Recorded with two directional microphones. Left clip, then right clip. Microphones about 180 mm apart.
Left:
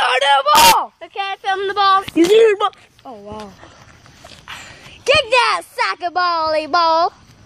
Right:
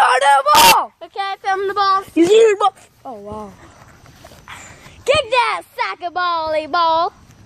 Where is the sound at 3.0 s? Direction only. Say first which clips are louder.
Right 2 dB; 20° right (ahead or behind).